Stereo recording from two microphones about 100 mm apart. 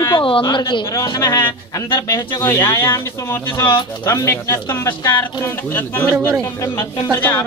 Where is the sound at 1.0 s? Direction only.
35° left (ahead or behind); by 6.1 s 20° left (ahead or behind).